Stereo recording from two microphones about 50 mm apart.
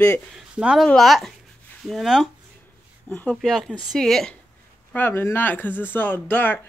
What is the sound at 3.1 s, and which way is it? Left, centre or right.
Speech, left.